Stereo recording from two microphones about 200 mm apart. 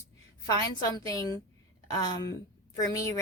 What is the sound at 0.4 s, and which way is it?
A woman's voice, 20° left (ahead or behind).